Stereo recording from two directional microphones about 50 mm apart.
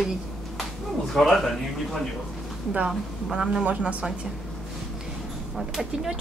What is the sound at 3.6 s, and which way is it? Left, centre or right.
Speech, right.